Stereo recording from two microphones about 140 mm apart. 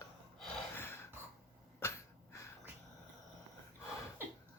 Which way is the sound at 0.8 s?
15° left (ahead or behind).